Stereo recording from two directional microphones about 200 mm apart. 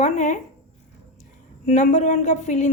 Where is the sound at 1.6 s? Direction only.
40° left (ahead or behind).